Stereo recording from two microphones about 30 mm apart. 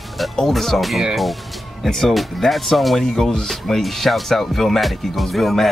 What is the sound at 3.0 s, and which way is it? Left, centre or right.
Speech, centre.